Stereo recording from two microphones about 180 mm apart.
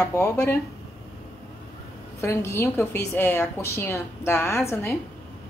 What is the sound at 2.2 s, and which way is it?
A woman's voice, 15° left (ahead or behind).